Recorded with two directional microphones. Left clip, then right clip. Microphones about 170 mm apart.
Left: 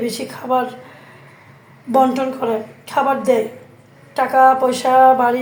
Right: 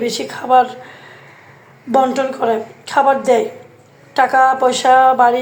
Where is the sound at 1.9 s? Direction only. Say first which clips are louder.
Right 1 dB; 25° right (ahead or behind).